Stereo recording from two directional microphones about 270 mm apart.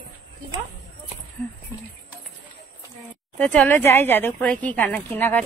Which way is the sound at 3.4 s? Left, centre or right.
Centre.